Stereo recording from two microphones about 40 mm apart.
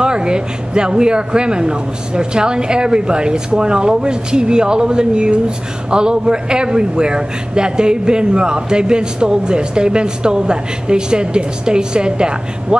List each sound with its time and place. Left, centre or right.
0.0 s a man's voice: right